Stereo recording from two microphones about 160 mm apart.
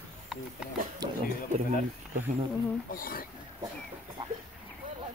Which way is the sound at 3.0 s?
65° left (ahead or behind).